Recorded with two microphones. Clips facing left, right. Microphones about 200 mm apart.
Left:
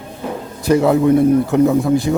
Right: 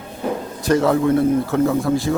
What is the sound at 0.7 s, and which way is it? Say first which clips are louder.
A man's voice: left 4 dB; 10° left (ahead or behind).